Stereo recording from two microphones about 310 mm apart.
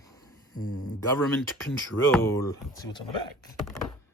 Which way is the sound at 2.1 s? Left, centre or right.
Centre.